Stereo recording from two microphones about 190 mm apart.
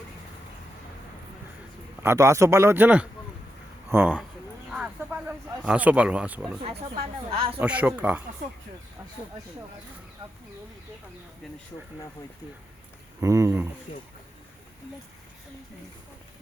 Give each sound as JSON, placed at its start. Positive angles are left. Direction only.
{"t": 2.0, "sound": "speech", "side_deg": -15}
{"t": 4.7, "sound": "a sound", "side_deg": -5}
{"t": 7.3, "sound": "speech", "side_deg": -25}
{"t": 7.6, "sound": "speech", "side_deg": -5}
{"t": 13.1, "sound": "speech", "side_deg": -15}
{"t": 13.9, "sound": "speech", "side_deg": 30}